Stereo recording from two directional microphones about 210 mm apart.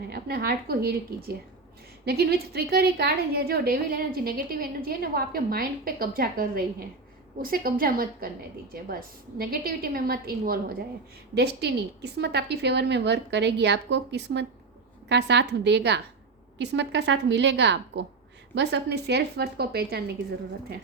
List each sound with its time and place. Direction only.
0.1 s a woman's voice: 50° right (ahead or behind)
2.0 s a woman's voice: 50° right (ahead or behind)